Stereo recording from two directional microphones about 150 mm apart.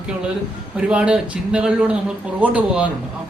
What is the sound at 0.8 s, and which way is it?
A woman's voice, 5° right (ahead or behind).